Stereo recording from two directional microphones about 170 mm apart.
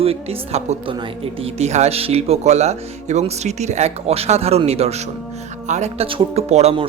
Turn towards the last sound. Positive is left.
turn(degrees=-35)  # may be behind; listen again after turning